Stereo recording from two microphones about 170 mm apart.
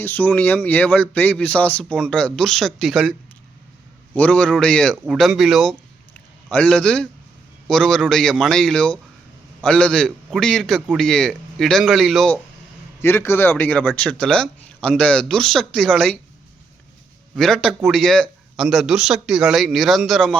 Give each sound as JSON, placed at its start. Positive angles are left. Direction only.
{"t": 0.0, "sound": "speech", "side_deg": 10}
{"t": 13.0, "sound": "speech", "side_deg": 15}
{"t": 17.3, "sound": "speech", "side_deg": 0}